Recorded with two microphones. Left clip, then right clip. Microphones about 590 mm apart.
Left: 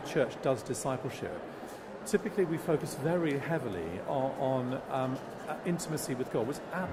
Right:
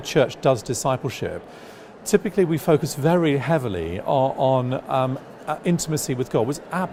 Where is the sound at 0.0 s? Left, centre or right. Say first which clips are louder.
Right 11 dB; right.